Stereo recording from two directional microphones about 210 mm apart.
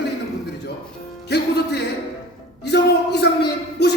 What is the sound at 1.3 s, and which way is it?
Music, 50° left (ahead or behind).